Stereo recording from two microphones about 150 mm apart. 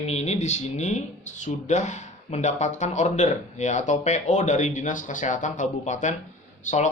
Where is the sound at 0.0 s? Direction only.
45° left (ahead or behind).